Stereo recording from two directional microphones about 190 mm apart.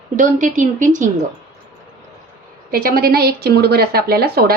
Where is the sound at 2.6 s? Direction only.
50° right (ahead or behind).